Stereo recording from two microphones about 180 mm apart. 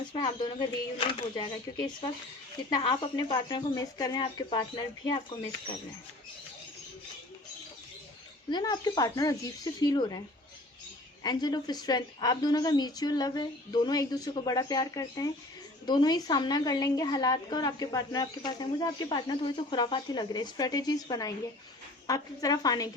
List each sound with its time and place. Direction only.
0.1 s a woman's voice: 25° left (ahead or behind)
2.6 s a woman's voice: 25° left (ahead or behind)
8.4 s a woman's voice: 25° left (ahead or behind)
11.2 s a woman's voice: 20° left (ahead or behind)